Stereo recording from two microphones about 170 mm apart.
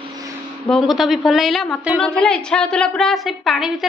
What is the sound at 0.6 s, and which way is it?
A woman's voice, centre (ahead or behind).